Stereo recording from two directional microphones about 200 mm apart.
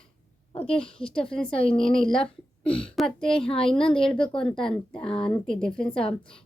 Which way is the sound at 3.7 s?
25° left (ahead or behind).